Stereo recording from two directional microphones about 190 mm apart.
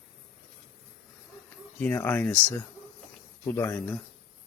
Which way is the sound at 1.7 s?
10° left (ahead or behind).